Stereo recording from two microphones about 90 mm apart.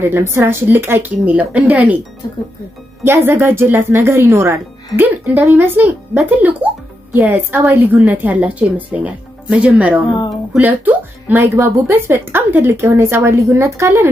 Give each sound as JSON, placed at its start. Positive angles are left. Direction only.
{"t": 0.0, "sound": "speech", "side_deg": -30}
{"t": 2.2, "sound": "speech", "side_deg": 50}
{"t": 3.0, "sound": "speech", "side_deg": -25}
{"t": 6.3, "sound": "music", "side_deg": -20}
{"t": 7.2, "sound": "speech", "side_deg": -20}